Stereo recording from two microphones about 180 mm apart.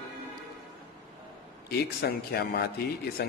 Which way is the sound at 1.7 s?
60° left (ahead or behind).